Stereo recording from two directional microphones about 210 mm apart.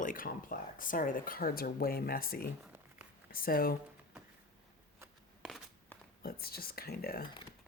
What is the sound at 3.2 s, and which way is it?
Speech, 45° left (ahead or behind).